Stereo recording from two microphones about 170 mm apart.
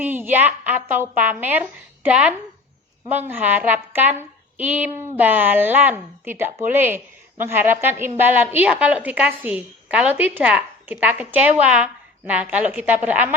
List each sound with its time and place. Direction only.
0.0 s speech: 10° right (ahead or behind)